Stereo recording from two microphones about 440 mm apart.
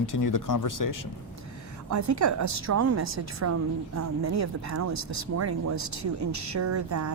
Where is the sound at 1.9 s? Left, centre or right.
Right.